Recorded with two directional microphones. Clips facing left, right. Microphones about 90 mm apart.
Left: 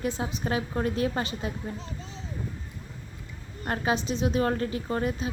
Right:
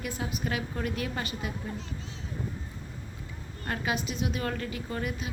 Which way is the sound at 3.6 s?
30° left (ahead or behind).